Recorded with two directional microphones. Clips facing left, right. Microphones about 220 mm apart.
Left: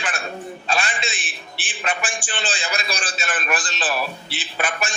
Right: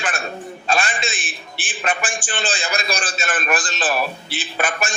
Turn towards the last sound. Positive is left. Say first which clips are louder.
# right 2 dB
turn(degrees=-45)  # may be behind; listen again after turning